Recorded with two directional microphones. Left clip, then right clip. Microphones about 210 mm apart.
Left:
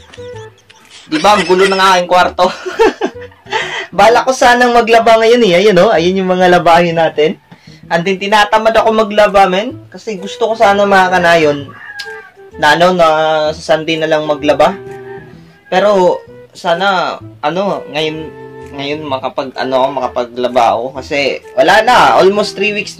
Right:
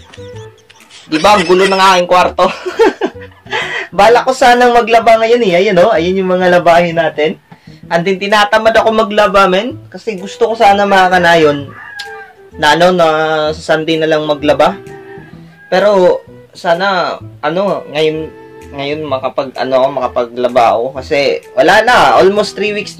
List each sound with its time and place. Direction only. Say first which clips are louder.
0.2 s music: left 3 dB; centre (ahead or behind)
1.3 s speech: right 1 dB; centre (ahead or behind)
2.0 s speech: even; 30° right (ahead or behind)
2.6 s a sound: right 1 dB; 10° right (ahead or behind)
4.8 s speech: left 1 dB; 30° left (ahead or behind)
8.0 s speech: even; 5° right (ahead or behind)
12.5 s speech: even; 10° right (ahead or behind)
15.7 s speech: right 1 dB; 5° right (ahead or behind)